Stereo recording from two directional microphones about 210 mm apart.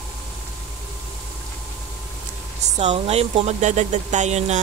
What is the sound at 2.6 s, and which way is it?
Speech, 30° right (ahead or behind).